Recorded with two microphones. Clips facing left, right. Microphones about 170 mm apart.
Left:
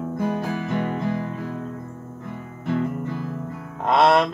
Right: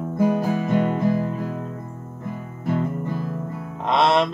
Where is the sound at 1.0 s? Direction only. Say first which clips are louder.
Right 4 dB; 45° right (ahead or behind).